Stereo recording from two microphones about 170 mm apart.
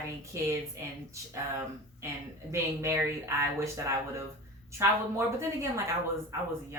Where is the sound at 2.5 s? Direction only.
15° right (ahead or behind).